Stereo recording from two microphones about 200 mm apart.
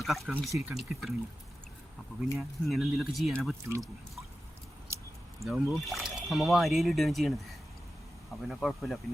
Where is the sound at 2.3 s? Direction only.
Centre (ahead or behind).